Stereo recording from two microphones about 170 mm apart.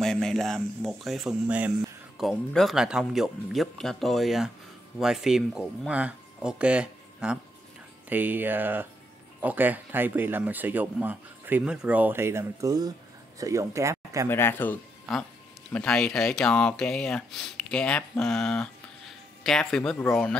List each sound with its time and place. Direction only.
0.0 s speech: 5° left (ahead or behind); by 14.2 s 20° right (ahead or behind)
14.3 s speech: 10° left (ahead or behind)